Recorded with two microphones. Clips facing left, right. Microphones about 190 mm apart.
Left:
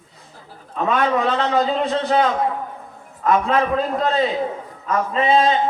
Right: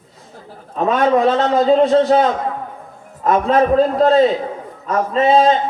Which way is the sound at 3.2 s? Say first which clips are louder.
Right 4 dB; 40° right (ahead or behind).